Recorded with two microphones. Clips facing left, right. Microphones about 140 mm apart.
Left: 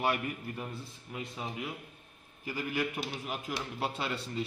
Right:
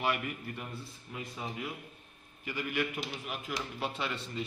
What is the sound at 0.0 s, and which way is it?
Speech, 35° left (ahead or behind).